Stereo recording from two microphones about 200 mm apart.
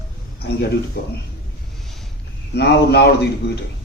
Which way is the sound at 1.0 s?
55° left (ahead or behind).